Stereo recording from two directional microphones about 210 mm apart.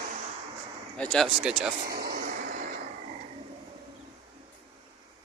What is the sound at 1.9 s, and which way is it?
Vehicle, 45° right (ahead or behind).